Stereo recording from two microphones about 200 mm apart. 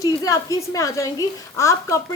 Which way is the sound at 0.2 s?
15° left (ahead or behind).